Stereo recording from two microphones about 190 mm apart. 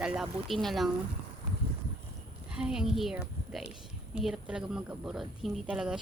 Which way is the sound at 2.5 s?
5° right (ahead or behind).